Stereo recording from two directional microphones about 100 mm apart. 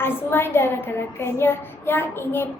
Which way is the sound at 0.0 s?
20° left (ahead or behind).